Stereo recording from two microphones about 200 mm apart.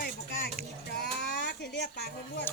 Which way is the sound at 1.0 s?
55° left (ahead or behind).